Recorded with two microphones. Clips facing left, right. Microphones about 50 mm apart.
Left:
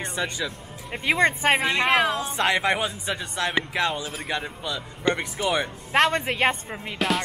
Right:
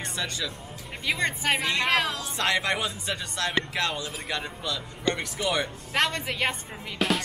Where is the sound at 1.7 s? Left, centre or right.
Left.